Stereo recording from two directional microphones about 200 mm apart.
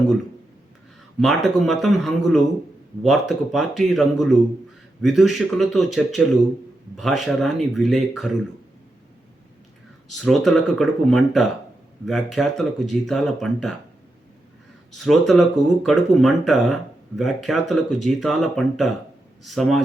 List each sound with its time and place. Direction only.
1.2 s speech: centre (ahead or behind)
10.1 s speech: centre (ahead or behind)
14.9 s speech: centre (ahead or behind)